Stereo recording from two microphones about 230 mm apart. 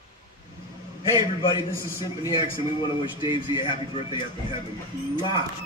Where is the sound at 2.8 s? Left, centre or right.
Centre.